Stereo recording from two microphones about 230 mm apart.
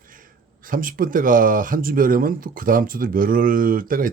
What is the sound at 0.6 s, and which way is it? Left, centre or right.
Speech, right.